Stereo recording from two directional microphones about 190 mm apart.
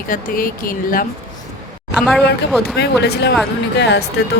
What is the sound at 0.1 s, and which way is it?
Speech, 50° left (ahead or behind).